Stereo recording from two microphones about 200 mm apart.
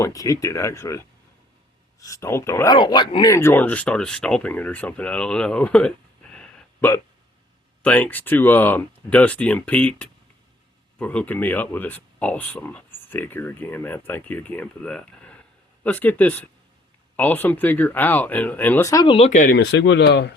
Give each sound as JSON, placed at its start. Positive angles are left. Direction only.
{"t": 0.0, "sound": "speech", "side_deg": 15}
{"t": 6.3, "sound": "hiccup", "side_deg": 5}
{"t": 7.8, "sound": "speech", "side_deg": 5}
{"t": 19.1, "sound": "speech", "side_deg": 35}
{"t": 19.5, "sound": "speech", "side_deg": 60}